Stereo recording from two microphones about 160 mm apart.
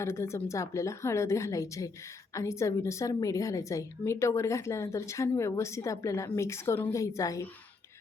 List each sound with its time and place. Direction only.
0.0 s a woman's voice: 15° left (ahead or behind)